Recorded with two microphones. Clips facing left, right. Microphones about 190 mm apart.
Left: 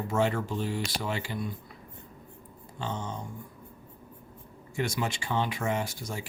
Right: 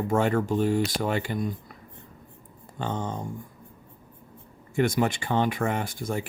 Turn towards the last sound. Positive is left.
turn(degrees=-55)  # may be behind; listen again after turning